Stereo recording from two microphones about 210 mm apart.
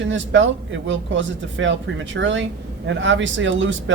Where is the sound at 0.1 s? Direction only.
60° right (ahead or behind).